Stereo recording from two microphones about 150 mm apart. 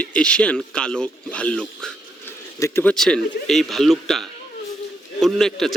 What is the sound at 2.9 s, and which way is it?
A man's voice, 5° left (ahead or behind).